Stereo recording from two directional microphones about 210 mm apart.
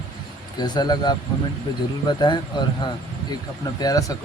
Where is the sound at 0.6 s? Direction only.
20° left (ahead or behind).